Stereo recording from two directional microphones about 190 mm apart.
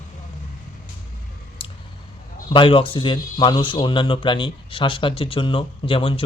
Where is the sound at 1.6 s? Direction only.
30° left (ahead or behind).